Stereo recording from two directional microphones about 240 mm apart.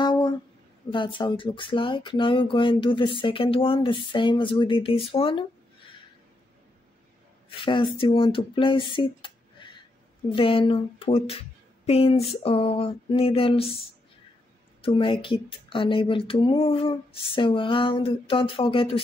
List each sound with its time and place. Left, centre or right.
0.0 s a sound: centre
0.9 s speech: left
7.4 s speech: left
14.8 s speech: left